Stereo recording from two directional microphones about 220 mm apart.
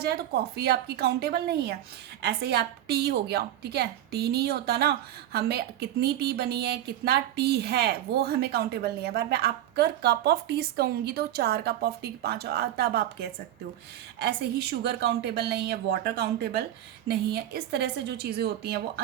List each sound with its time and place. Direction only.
0.0 s a woman's voice: 45° right (ahead or behind)